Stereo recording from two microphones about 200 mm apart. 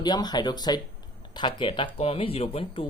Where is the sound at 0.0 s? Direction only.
20° left (ahead or behind).